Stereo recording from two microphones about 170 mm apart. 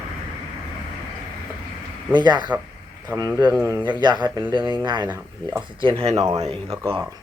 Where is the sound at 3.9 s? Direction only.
25° right (ahead or behind).